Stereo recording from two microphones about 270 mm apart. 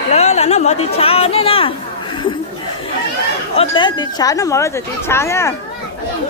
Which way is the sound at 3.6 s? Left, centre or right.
Centre.